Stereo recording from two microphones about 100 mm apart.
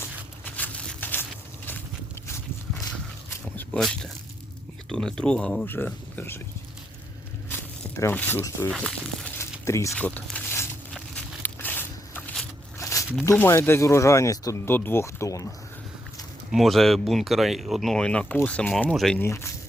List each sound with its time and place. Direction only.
0.4 s a sound: 15° left (ahead or behind)
3.8 s speech: centre (ahead or behind)
5.6 s speech: 20° left (ahead or behind)
8.1 s speech: 20° left (ahead or behind)
8.7 s speech: 5° left (ahead or behind)
9.4 s a sound: 30° left (ahead or behind)
9.9 s speech: 15° left (ahead or behind)
10.3 s a sound: 25° left (ahead or behind)
12.8 s a sound: 35° left (ahead or behind)
13.3 s speech: 15° left (ahead or behind)
16.5 s speech: centre (ahead or behind)
19.2 s speech: 25° left (ahead or behind)